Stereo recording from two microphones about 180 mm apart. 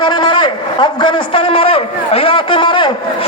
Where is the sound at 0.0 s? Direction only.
25° left (ahead or behind).